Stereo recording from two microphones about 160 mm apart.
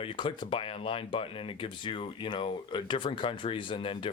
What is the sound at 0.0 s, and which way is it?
Speech, 30° left (ahead or behind).